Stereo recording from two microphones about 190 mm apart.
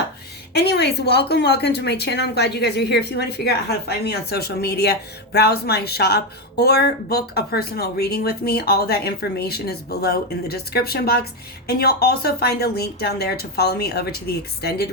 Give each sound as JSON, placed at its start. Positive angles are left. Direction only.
{"t": 0.5, "sound": "a woman's voice", "side_deg": 60}